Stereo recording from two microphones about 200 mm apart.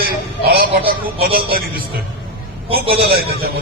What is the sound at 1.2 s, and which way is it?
Speech, 50° right (ahead or behind).